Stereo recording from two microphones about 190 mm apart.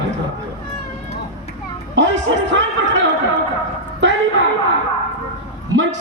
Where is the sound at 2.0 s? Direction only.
70° right (ahead or behind).